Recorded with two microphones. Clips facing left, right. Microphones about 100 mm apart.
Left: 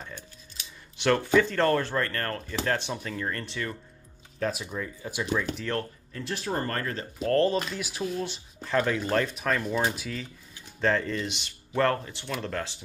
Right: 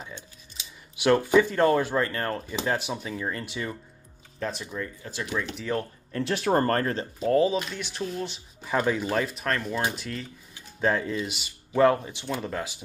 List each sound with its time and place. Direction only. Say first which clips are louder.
0.9 s speech: right 2 dB; 10° right (ahead or behind)
4.4 s speech: left 1 dB; 5° left (ahead or behind)
5.6 s speech: right 2 dB; 10° right (ahead or behind)
6.1 s speech: right 7 dB; 65° right (ahead or behind)
6.5 s speech: right 7 dB; 45° right (ahead or behind)
7.2 s speech: right 1 dB; 10° right (ahead or behind)
8.6 s speech: right 1 dB; 10° right (ahead or behind)